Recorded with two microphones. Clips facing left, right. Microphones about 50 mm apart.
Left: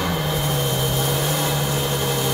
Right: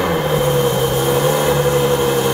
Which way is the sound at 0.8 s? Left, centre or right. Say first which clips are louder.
Right 7 dB; right.